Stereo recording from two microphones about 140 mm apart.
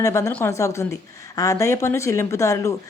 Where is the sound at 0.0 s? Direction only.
20° left (ahead or behind).